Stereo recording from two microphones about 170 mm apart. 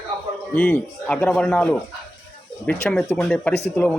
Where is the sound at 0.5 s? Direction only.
10° left (ahead or behind).